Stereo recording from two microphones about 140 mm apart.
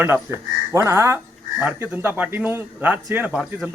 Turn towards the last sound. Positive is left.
turn(degrees=-5)  # may be behind; listen again after turning